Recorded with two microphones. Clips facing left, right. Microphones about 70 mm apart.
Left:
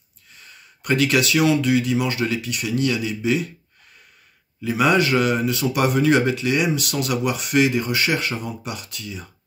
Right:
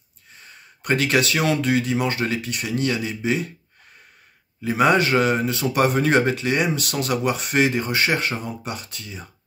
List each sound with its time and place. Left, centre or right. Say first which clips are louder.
0.4 s speech: right 1 dB; right
4.6 s speech: even; right